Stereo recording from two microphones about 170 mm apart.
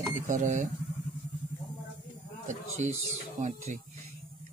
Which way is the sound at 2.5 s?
45° right (ahead or behind).